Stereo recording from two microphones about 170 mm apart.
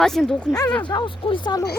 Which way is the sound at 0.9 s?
30° left (ahead or behind).